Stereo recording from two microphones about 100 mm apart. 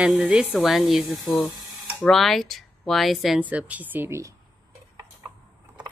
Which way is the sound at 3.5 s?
15° right (ahead or behind).